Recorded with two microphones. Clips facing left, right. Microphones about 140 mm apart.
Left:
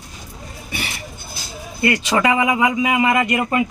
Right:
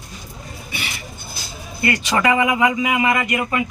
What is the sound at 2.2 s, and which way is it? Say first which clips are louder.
Speech: right 1 dB; 25° left (ahead or behind).